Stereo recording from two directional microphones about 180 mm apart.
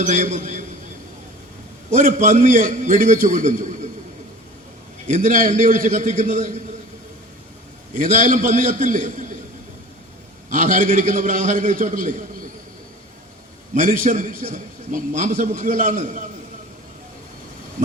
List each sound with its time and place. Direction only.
0.0 s a man's voice: 45° right (ahead or behind)
1.9 s a man's voice: 45° right (ahead or behind)
5.0 s a man's voice: 45° right (ahead or behind)
7.9 s a man's voice: 45° right (ahead or behind)
10.5 s a man's voice: 45° right (ahead or behind)
13.7 s a man's voice: 45° right (ahead or behind)